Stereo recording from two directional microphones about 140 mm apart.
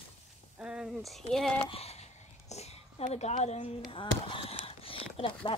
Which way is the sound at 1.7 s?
45° left (ahead or behind).